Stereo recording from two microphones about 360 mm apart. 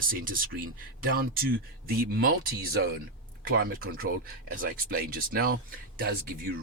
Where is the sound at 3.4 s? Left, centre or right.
Right.